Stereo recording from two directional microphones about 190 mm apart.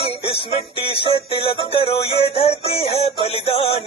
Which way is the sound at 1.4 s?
30° left (ahead or behind).